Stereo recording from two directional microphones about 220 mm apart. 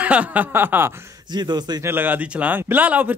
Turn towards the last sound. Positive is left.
turn(degrees=-10)  # may be behind; listen again after turning